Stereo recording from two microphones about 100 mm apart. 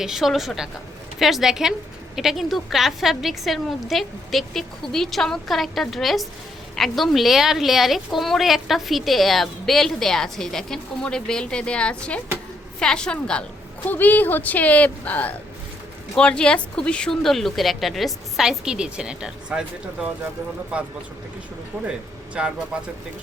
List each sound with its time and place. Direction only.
0.0 s a woman's voice: 5° right (ahead or behind)
22.4 s speech: 5° right (ahead or behind)